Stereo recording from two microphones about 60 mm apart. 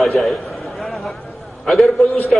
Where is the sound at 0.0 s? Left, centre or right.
Centre.